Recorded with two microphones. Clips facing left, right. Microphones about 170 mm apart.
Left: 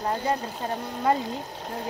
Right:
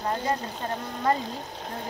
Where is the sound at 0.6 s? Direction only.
10° left (ahead or behind).